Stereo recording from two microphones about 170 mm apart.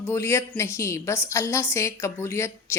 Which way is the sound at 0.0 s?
15° left (ahead or behind).